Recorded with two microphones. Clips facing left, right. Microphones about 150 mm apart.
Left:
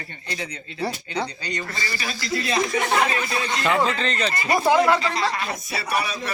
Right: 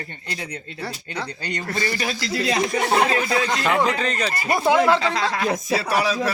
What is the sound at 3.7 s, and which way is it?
Speech, 15° right (ahead or behind).